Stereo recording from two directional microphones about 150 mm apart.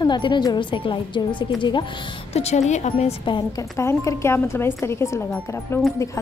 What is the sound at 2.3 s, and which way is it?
Speech, 45° left (ahead or behind).